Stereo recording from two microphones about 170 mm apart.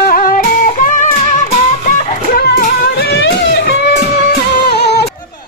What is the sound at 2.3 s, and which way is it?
Music, 65° left (ahead or behind).